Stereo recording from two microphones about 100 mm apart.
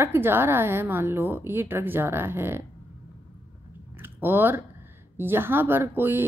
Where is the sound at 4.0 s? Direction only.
20° right (ahead or behind).